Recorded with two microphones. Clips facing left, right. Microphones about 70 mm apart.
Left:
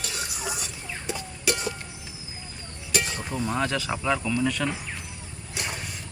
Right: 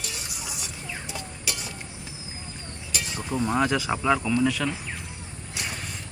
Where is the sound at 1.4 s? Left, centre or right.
Left.